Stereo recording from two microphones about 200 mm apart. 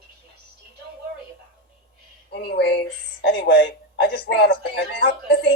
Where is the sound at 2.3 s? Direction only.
55° left (ahead or behind).